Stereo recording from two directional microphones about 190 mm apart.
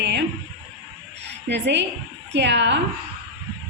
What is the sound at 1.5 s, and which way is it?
A woman's voice, 65° right (ahead or behind).